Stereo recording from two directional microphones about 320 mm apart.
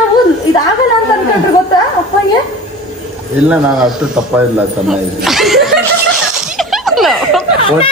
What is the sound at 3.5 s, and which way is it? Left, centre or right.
Speech, centre.